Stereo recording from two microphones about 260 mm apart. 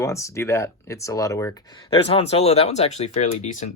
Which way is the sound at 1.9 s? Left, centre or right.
Left.